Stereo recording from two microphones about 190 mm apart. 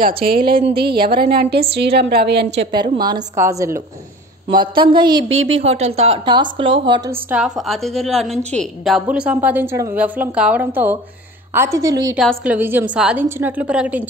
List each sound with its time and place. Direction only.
0.4 s a woman's voice: 25° right (ahead or behind)
0.7 s a woman's voice: 55° right (ahead or behind)
2.7 s a woman's voice: 20° right (ahead or behind)
5.3 s speech: 90° right
5.6 s a woman's voice: 35° right (ahead or behind); by 12.1 s 15° right (ahead or behind)
12.2 s a woman's voice: 5° right (ahead or behind)